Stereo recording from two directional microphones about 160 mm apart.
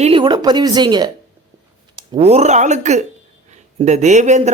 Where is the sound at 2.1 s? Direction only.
40° right (ahead or behind).